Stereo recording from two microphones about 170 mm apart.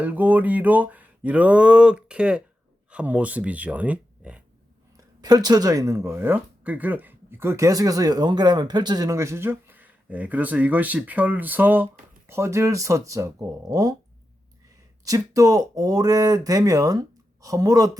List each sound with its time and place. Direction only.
0.0 s a sound: 10° right (ahead or behind)
2.9 s speech: 5° right (ahead or behind)
4.9 s speech: 25° right (ahead or behind)
15.0 s speech: 20° right (ahead or behind)